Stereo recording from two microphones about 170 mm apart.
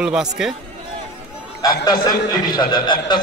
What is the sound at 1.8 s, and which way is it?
A man's voice, 25° left (ahead or behind).